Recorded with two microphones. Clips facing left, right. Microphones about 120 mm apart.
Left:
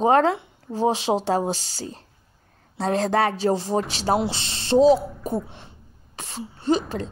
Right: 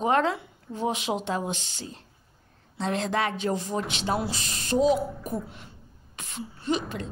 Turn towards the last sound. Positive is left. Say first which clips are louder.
# left 6 dB
turn(degrees=35)  # may be behind; listen again after turning